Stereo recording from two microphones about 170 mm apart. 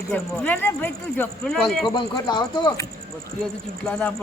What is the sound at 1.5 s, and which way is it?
Speech, centre (ahead or behind).